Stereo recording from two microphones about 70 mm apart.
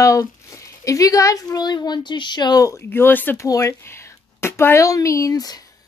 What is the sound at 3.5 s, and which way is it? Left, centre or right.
Speech, left.